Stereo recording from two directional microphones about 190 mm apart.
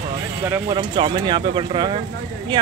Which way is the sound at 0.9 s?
25° right (ahead or behind).